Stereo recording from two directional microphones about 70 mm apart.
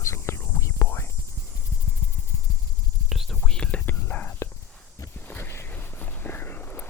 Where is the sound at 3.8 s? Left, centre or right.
Left.